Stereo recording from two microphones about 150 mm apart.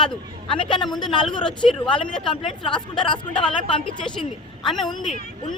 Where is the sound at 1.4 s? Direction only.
5° left (ahead or behind).